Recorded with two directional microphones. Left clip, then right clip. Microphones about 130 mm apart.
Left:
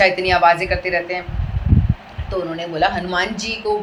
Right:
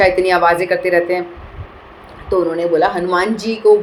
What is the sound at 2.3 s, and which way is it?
A woman's voice, 50° right (ahead or behind).